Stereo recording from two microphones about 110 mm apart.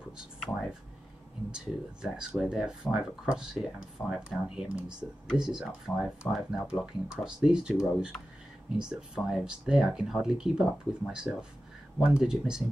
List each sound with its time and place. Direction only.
1.5 s speech: 5° right (ahead or behind)